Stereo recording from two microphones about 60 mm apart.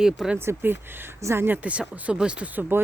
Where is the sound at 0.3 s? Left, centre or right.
Right.